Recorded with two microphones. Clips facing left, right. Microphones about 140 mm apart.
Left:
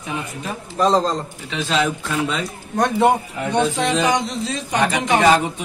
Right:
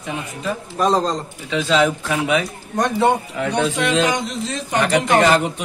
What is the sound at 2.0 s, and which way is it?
Speech, 80° right.